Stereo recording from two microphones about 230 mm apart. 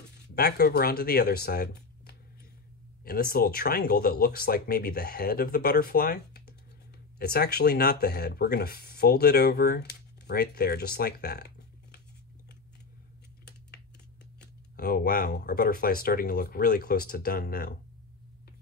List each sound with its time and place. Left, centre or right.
0.4 s speech: left
14.4 s speech: left